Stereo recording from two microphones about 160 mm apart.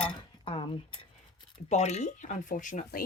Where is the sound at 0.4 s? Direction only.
35° left (ahead or behind).